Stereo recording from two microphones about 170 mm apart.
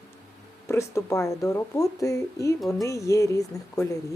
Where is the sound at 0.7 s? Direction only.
15° left (ahead or behind).